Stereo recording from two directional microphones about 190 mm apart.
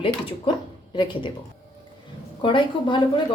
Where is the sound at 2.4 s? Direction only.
25° left (ahead or behind).